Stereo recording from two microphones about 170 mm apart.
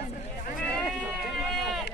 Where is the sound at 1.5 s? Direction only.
Centre (ahead or behind).